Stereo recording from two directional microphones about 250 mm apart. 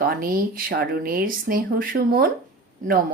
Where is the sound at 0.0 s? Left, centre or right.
Right.